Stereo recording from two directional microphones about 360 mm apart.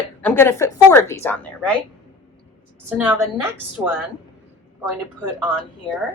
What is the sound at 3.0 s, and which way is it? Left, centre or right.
A woman's voice, centre.